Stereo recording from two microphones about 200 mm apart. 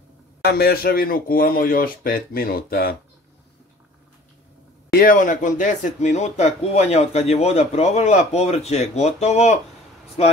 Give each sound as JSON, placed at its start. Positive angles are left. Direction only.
{"t": 0.4, "sound": "speech", "side_deg": 50}
{"t": 4.9, "sound": "speech", "side_deg": 45}